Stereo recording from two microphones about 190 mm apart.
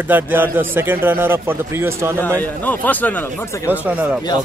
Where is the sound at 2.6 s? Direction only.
10° left (ahead or behind).